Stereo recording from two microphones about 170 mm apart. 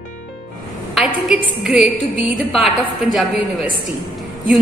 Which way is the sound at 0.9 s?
Centre (ahead or behind).